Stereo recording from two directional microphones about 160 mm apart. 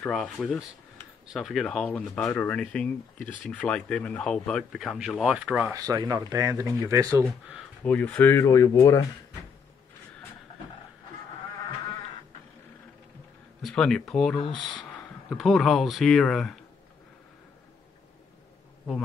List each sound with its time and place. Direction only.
0.0 s speech: 5° left (ahead or behind)
5.7 s speech: 20° right (ahead or behind)
7.2 s speech: 5° left (ahead or behind); by 9.0 s 20° left (ahead or behind)
13.6 s speech: 5° left (ahead or behind)